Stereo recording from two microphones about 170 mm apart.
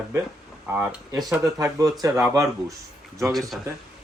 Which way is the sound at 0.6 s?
10° right (ahead or behind).